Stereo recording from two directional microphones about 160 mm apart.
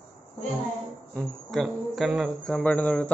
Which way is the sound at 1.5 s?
Centre (ahead or behind).